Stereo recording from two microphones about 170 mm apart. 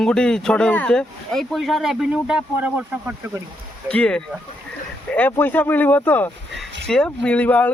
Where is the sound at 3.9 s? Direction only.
5° left (ahead or behind).